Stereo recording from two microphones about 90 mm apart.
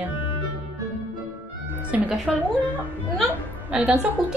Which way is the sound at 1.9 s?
15° right (ahead or behind).